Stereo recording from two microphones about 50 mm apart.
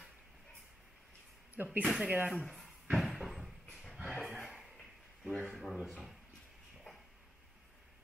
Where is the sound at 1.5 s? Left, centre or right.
Right.